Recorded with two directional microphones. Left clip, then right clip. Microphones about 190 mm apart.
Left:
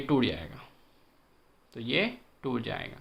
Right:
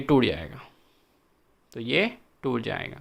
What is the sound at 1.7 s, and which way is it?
Speech, 40° right (ahead or behind).